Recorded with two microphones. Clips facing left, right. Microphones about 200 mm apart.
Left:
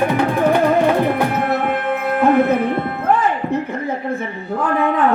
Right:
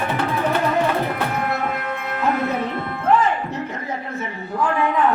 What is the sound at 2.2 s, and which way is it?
Music, 55° left (ahead or behind).